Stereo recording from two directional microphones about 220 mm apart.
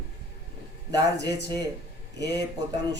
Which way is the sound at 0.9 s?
15° right (ahead or behind).